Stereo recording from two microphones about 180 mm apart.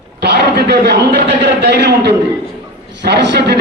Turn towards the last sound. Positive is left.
turn(degrees=-70)  # may be behind; listen again after turning